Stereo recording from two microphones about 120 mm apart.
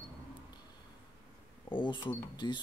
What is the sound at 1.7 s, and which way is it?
Speech, 45° left (ahead or behind).